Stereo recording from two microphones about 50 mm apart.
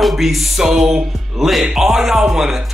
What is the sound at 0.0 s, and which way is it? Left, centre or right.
Speech, centre.